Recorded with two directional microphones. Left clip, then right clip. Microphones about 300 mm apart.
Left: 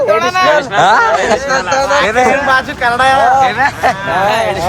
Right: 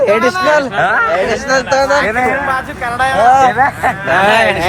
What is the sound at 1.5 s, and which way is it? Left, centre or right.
Speech, right.